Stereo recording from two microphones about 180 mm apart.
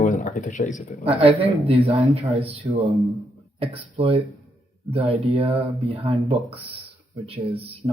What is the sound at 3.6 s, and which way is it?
Speech, 35° right (ahead or behind).